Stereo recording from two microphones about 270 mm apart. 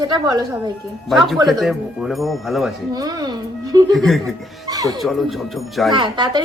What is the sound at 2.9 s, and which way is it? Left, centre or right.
Speech, centre.